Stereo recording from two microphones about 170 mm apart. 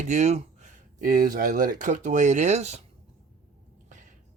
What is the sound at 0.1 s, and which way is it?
Speech, 45° right (ahead or behind).